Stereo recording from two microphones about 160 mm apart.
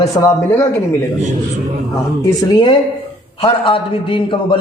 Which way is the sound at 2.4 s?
25° left (ahead or behind).